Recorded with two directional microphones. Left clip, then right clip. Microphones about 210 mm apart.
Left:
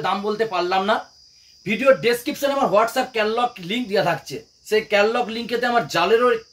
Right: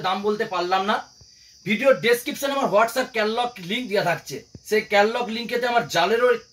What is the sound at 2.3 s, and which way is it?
Speech, 10° right (ahead or behind).